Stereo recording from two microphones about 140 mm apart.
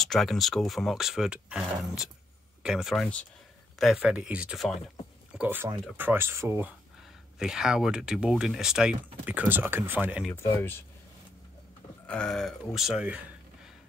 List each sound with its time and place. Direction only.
0.0 s speech: centre (ahead or behind)
5.3 s speech: 10° right (ahead or behind)
7.3 s speech: 5° right (ahead or behind)
10.3 s speech: 20° left (ahead or behind)
12.1 s speech: 5° left (ahead or behind)